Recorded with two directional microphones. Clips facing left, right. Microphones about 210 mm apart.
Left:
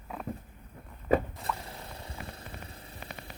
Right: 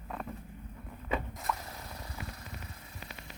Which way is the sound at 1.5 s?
Centre (ahead or behind).